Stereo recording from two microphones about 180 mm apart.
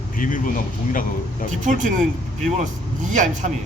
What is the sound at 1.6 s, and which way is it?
Speech, 45° right (ahead or behind).